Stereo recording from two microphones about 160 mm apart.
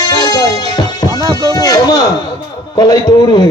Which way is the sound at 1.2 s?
20° right (ahead or behind).